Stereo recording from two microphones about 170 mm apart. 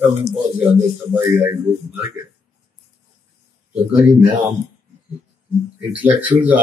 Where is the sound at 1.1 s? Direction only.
15° right (ahead or behind).